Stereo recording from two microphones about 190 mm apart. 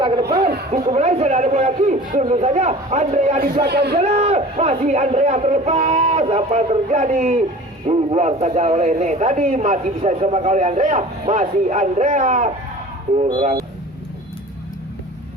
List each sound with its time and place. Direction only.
0.0 s a sound: 25° right (ahead or behind)
0.7 s a man's voice: 35° right (ahead or behind)
3.7 s speech: 60° right (ahead or behind)
4.0 s a man's voice: 35° right (ahead or behind)
13.2 s speech: 25° right (ahead or behind)